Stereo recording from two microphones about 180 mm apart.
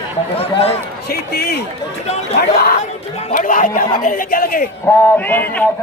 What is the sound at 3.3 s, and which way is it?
Speech, 50° left (ahead or behind).